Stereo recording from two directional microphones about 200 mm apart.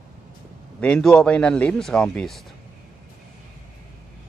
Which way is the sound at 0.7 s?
5° left (ahead or behind).